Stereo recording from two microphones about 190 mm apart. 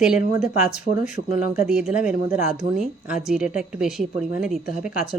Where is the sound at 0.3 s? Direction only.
35° left (ahead or behind).